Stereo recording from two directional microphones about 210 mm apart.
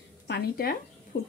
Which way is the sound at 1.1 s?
45° left (ahead or behind).